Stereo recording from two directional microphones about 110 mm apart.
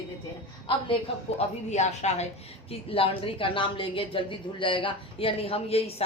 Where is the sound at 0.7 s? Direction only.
50° left (ahead or behind).